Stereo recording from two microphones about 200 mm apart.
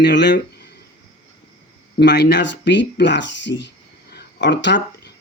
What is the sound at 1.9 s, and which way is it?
Speech, 55° left (ahead or behind).